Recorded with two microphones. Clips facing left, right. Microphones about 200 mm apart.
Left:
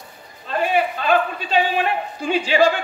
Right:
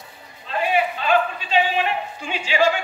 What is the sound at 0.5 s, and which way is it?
A man's voice, 45° left (ahead or behind).